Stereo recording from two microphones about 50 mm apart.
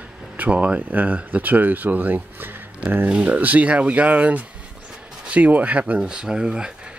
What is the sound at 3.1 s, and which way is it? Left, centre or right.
Speech, right.